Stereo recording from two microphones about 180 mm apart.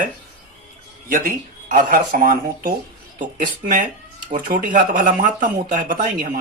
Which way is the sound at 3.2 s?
50° right (ahead or behind).